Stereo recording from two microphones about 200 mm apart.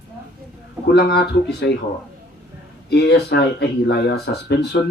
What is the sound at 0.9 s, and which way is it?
Speech, 55° left (ahead or behind).